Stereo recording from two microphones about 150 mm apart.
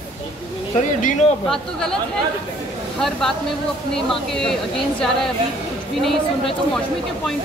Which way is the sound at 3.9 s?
5° left (ahead or behind).